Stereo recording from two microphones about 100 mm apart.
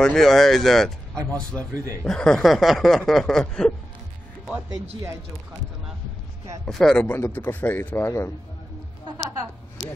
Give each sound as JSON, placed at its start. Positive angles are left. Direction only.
{"t": 0.0, "sound": "speech", "side_deg": 5}
{"t": 6.6, "sound": "speech", "side_deg": 5}
{"t": 7.2, "sound": "speech", "side_deg": 20}